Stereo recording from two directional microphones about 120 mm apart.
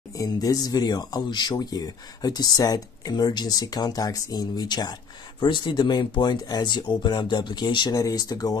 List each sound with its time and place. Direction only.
0.1 s speech: 30° left (ahead or behind)